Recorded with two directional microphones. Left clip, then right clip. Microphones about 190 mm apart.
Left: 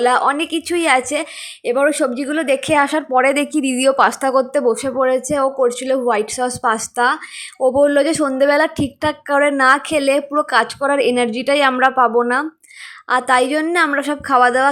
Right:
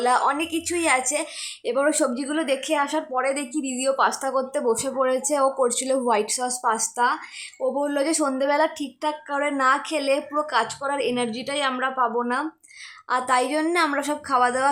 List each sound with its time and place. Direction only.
0.0 s a woman's voice: 15° left (ahead or behind)